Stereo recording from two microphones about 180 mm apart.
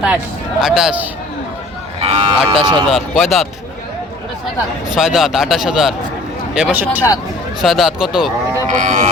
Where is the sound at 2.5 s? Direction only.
25° right (ahead or behind).